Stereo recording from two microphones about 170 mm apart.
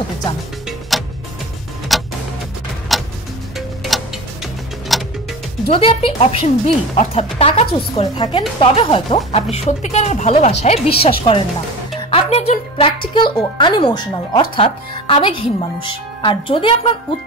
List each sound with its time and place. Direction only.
0.7 s music: centre (ahead or behind)
1.9 s tick-tock: centre (ahead or behind)
5.7 s a woman's voice: 35° left (ahead or behind)